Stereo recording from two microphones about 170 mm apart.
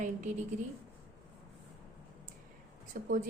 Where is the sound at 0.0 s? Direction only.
45° right (ahead or behind).